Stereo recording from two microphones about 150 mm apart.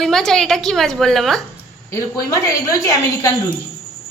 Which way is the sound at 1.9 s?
20° left (ahead or behind).